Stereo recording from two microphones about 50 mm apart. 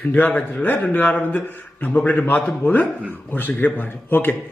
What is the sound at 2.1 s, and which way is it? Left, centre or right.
A man's voice, left.